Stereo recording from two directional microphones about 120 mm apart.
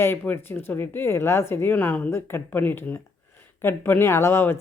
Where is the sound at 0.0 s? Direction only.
20° left (ahead or behind).